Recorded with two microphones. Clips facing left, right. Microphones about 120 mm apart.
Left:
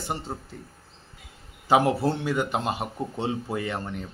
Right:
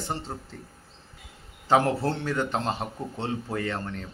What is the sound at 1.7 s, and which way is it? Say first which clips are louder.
Speech: left 1 dB; 10° left (ahead or behind).